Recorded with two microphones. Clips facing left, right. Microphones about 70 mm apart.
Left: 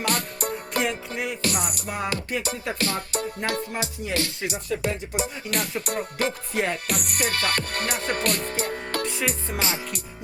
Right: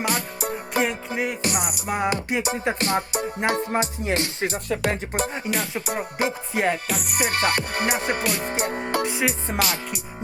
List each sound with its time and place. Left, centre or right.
0.0 s music: centre
1.4 s music: centre
4.4 s music: right
4.8 s music: right
5.5 s music: centre
6.1 s music: centre
6.6 s music: centre
7.3 s music: right
8.4 s music: right
9.6 s music: left